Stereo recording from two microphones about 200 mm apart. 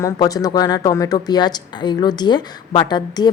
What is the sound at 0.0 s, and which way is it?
A woman's voice, 20° left (ahead or behind).